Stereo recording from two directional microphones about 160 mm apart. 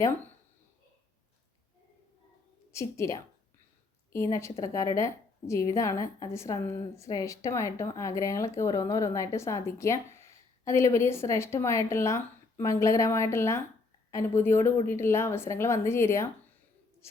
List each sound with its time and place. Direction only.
2.7 s a woman's voice: 20° left (ahead or behind)